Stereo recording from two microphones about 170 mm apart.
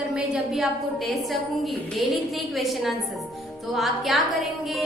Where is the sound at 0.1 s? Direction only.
Centre (ahead or behind).